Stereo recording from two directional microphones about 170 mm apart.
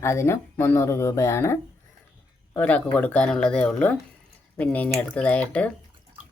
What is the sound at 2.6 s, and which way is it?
Speech, 10° left (ahead or behind).